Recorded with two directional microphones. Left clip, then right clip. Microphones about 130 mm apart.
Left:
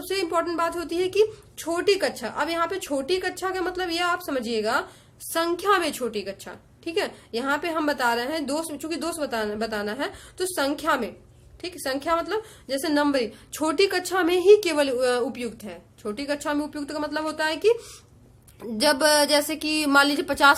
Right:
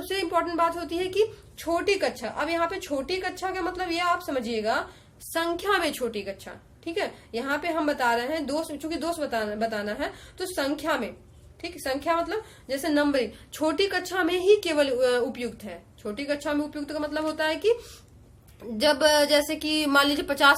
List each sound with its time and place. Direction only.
0.0 s a woman's voice: 35° left (ahead or behind)